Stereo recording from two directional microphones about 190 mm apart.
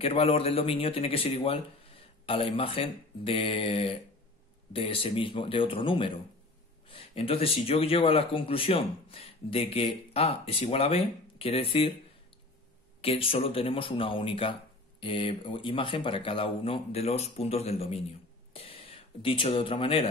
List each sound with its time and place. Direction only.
0.0 s speech: 30° left (ahead or behind)
13.0 s speech: 30° left (ahead or behind)